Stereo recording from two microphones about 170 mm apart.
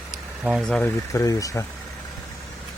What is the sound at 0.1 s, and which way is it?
Speech, 5° right (ahead or behind).